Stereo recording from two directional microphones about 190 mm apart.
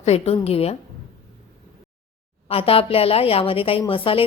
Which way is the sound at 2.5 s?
30° left (ahead or behind).